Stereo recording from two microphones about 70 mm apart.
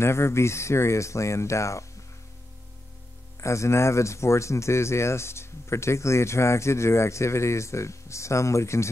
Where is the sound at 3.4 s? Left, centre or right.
Left.